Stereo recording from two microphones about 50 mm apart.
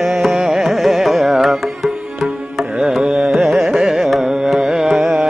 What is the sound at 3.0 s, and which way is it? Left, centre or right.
Carnatic music, centre.